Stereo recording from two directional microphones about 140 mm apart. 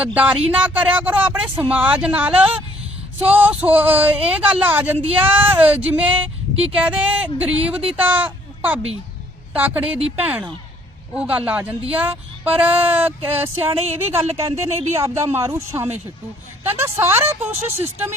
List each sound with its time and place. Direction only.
0.0 s speech: 10° right (ahead or behind)